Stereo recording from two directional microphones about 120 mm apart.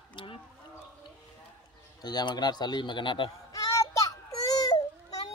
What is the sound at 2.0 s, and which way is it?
A man's voice, 35° left (ahead or behind).